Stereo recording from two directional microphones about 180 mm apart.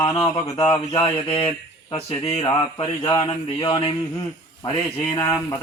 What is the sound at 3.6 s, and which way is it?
Speech, 30° left (ahead or behind).